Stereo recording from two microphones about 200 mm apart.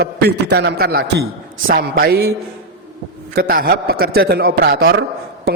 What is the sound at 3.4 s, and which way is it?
A man's voice, 45° right (ahead or behind).